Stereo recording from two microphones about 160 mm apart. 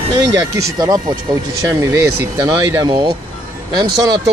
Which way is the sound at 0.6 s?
25° right (ahead or behind).